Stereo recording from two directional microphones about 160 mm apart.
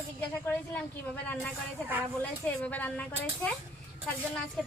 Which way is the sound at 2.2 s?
10° left (ahead or behind).